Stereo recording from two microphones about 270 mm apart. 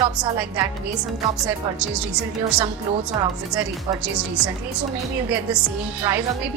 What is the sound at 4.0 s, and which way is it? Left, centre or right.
A woman's voice, centre.